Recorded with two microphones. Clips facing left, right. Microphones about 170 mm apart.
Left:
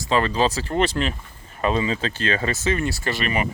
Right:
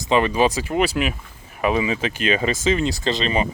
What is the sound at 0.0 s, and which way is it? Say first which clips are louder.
Speech: right 3 dB; 15° right (ahead or behind).